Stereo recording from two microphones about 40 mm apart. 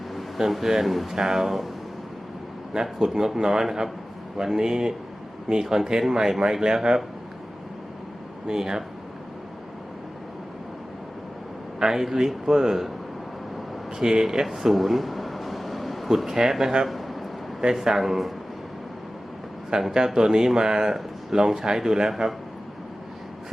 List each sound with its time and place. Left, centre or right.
0.3 s speech: centre
3.0 s speech: centre
8.4 s speech: centre
11.8 s speech: centre
14.0 s speech: centre
14.4 s air conditioning: centre
16.8 s a sound: centre
17.6 s speech: centre
19.7 s speech: centre